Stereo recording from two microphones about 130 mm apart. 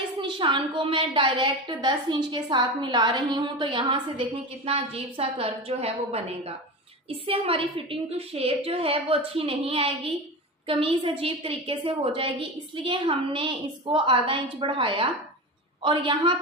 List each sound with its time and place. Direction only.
0.2 s a woman's voice: 40° right (ahead or behind)